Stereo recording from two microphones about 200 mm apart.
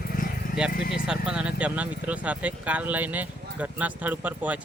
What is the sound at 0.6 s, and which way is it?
Speech, 5° right (ahead or behind).